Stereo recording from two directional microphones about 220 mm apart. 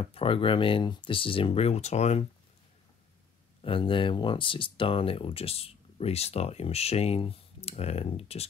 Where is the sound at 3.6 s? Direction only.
25° left (ahead or behind).